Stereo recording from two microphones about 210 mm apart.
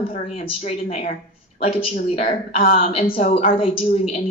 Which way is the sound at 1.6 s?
30° left (ahead or behind).